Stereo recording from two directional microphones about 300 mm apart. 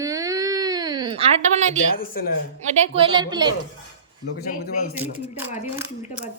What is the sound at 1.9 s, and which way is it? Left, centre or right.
Speech, left.